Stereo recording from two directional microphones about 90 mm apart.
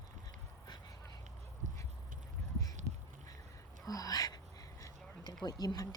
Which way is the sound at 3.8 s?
45° left (ahead or behind).